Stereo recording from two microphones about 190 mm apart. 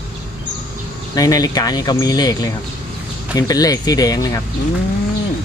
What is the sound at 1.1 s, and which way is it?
Speech, 20° left (ahead or behind).